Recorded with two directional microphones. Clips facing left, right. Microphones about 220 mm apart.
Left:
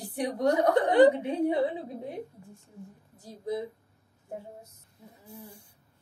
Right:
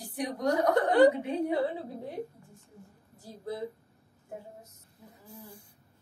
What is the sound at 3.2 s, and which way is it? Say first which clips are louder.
Speech: left 5 dB; 20° left (ahead or behind).